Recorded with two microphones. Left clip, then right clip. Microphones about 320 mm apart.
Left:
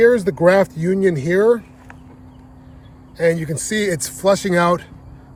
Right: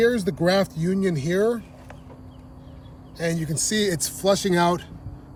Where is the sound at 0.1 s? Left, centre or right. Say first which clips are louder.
Left 8 dB; centre.